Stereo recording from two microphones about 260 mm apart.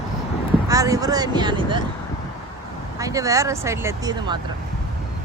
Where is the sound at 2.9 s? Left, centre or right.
Centre.